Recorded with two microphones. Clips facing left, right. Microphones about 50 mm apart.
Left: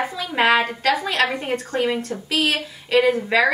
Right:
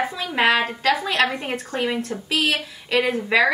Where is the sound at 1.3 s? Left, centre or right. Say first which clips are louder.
Left 3 dB; centre.